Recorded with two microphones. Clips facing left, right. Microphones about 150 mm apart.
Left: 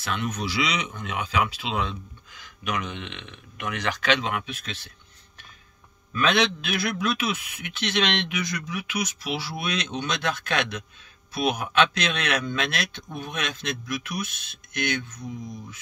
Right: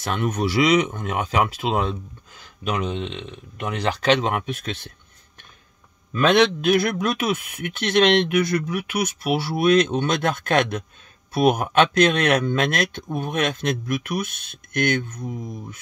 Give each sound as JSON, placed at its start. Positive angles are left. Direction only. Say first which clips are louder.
{"t": 0.0, "sound": "speech", "louder": "right 6 dB", "side_deg": -45}
{"t": 2.6, "sound": "speech", "louder": "right 5 dB", "side_deg": -30}
{"t": 6.3, "sound": "speech", "louder": "right 8 dB", "side_deg": -50}